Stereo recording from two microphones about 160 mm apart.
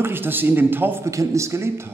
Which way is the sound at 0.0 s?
15° right (ahead or behind).